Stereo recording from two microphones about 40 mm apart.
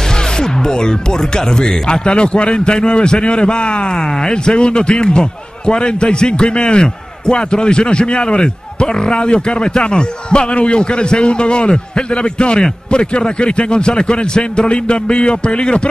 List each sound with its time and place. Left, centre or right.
0.4 s music: centre
1.6 s a man's voice: left